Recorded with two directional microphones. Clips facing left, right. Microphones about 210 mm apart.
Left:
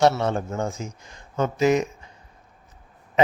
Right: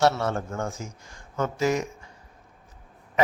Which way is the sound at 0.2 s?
20° left (ahead or behind).